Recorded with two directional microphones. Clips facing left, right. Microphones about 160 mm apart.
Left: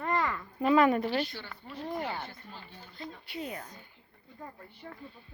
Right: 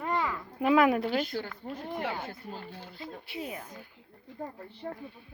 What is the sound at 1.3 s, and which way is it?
Speech, 45° right (ahead or behind).